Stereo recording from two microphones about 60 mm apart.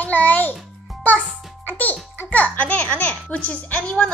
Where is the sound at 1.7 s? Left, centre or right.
Left.